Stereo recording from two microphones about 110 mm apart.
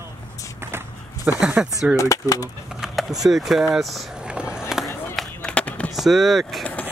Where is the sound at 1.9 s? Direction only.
30° left (ahead or behind).